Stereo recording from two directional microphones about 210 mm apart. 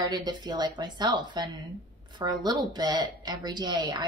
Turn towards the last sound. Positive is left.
turn(degrees=-20)  # may be behind; listen again after turning